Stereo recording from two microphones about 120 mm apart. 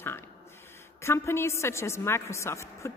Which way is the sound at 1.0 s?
20° left (ahead or behind).